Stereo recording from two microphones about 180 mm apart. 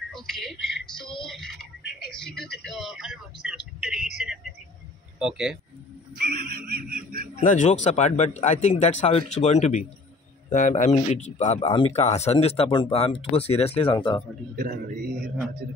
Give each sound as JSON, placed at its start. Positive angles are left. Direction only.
{"t": 0.1, "sound": "speech", "side_deg": 0}
{"t": 6.6, "sound": "a man's voice", "side_deg": -55}
{"t": 7.3, "sound": "speech", "side_deg": 45}
{"t": 14.5, "sound": "a man's voice", "side_deg": -50}